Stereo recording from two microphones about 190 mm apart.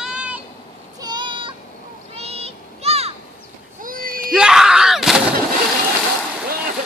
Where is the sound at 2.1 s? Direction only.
30° right (ahead or behind).